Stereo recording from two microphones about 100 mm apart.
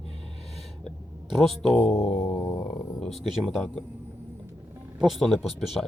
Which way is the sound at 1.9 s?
90° left.